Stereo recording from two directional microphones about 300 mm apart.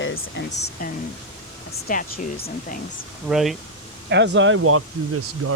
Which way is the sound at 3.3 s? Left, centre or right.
Centre.